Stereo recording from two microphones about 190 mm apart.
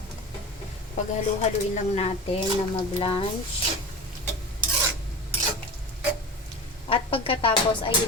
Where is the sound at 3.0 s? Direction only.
30° left (ahead or behind).